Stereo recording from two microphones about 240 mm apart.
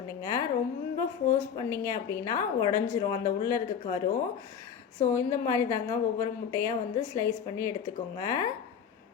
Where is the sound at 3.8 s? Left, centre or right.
Left.